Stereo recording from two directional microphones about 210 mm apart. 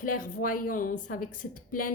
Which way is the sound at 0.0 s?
40° left (ahead or behind).